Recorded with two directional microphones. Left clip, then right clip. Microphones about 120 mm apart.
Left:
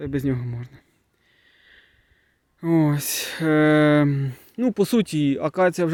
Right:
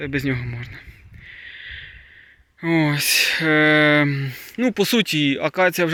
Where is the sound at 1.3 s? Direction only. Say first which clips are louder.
Right 18 dB; 45° left (ahead or behind).